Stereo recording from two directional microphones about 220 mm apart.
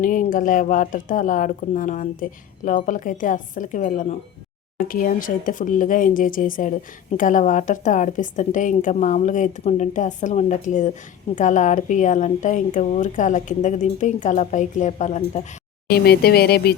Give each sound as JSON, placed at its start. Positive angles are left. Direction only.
{"t": 0.0, "sound": "speech", "side_deg": 35}
{"t": 15.9, "sound": "speech", "side_deg": 45}